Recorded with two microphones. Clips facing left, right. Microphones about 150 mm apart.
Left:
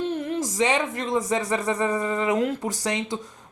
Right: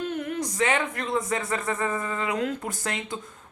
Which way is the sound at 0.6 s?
25° left (ahead or behind).